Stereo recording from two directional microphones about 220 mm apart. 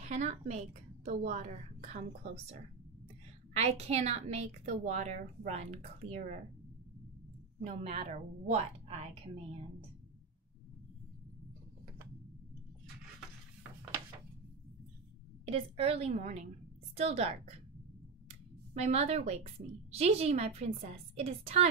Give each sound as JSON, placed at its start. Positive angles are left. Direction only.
{"t": 0.0, "sound": "a woman's voice", "side_deg": -30}
{"t": 3.5, "sound": "a woman's voice", "side_deg": -30}
{"t": 7.6, "sound": "speech", "side_deg": -30}
{"t": 15.4, "sound": "speech", "side_deg": -25}